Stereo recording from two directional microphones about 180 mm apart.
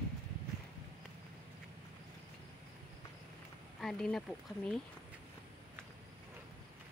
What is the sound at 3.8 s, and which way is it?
Speech, 5° left (ahead or behind).